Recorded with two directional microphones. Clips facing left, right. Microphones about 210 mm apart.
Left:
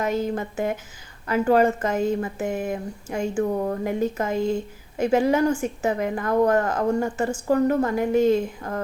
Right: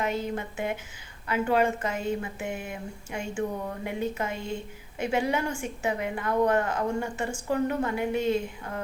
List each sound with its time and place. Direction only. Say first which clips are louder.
0.0 s a woman's voice: left 5 dB; 40° left (ahead or behind)